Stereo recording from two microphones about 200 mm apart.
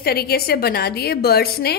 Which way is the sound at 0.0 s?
50° left (ahead or behind).